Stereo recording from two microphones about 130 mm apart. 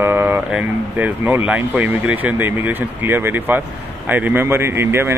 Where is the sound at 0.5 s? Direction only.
10° right (ahead or behind).